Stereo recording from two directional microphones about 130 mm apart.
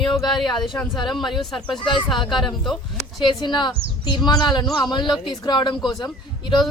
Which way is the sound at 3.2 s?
35° left (ahead or behind).